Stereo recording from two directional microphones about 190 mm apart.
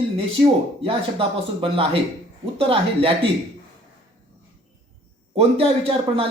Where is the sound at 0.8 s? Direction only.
30° right (ahead or behind).